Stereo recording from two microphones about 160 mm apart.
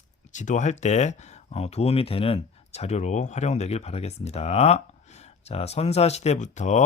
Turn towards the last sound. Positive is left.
turn(degrees=45)  # may be behind; listen again after turning